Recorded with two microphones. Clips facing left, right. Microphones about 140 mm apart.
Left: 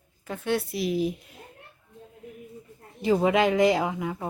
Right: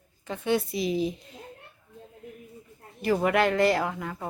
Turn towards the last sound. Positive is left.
turn(degrees=15)  # may be behind; listen again after turning